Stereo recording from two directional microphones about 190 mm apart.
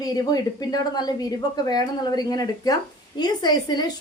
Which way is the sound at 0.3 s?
20° left (ahead or behind).